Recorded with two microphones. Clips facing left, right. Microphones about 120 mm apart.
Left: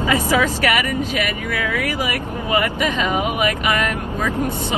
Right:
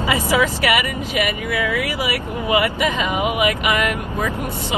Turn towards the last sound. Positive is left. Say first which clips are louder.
# right 1 dB
turn(degrees=40)  # may be behind; listen again after turning